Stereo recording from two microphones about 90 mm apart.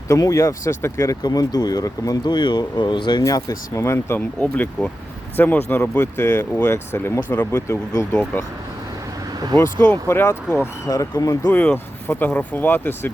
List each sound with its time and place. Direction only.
0.1 s speech: 40° left (ahead or behind)
1.2 s speech: 45° left (ahead or behind)
2.3 s speech: 55° left (ahead or behind)
3.2 s speech: 40° left (ahead or behind)
3.8 s speech: 30° left (ahead or behind)
4.4 s speech: 15° left (ahead or behind)
9.8 s speech: 20° left (ahead or behind); by 11.3 s 40° left (ahead or behind)
11.4 s speech: 20° left (ahead or behind)